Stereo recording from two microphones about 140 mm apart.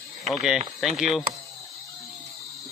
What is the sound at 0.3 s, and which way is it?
Speech, 5° right (ahead or behind).